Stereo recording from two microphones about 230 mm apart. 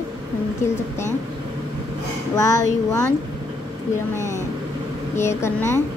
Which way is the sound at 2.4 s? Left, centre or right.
Centre.